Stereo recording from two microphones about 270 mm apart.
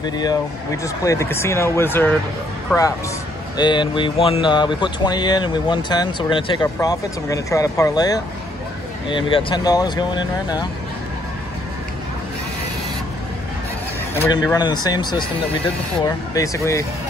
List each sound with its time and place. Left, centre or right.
0.0 s speech: centre
3.5 s speech: centre
14.1 s speech: centre
16.3 s speech: centre